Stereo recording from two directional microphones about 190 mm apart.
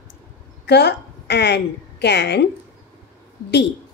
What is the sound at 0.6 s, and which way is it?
A woman's voice, 65° left (ahead or behind).